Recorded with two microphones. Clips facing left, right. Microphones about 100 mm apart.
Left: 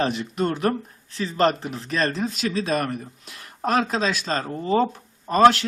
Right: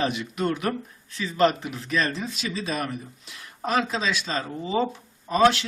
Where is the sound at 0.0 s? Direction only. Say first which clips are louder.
Left 2 dB; 35° left (ahead or behind).